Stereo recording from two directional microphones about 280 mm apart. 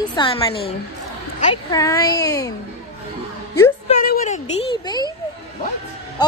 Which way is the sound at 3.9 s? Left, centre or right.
Left.